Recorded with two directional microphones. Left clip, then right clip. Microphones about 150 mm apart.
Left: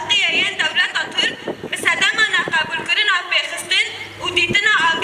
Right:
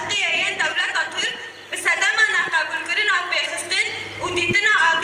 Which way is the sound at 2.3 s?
25° left (ahead or behind).